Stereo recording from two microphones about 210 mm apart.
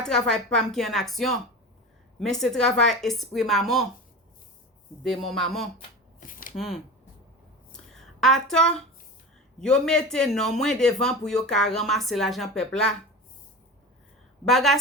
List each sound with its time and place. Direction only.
0.0 s a woman's voice: 5° left (ahead or behind)
5.0 s a woman's voice: centre (ahead or behind)
6.1 s shuffling cards: 40° left (ahead or behind)
6.6 s a woman's voice: centre (ahead or behind)
7.7 s a sound: centre (ahead or behind)
9.6 s a woman's voice: 5° left (ahead or behind)
14.4 s a woman's voice: centre (ahead or behind)